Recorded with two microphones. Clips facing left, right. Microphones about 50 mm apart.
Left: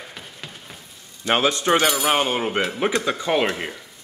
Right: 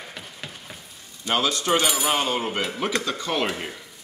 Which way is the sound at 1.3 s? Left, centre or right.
Left.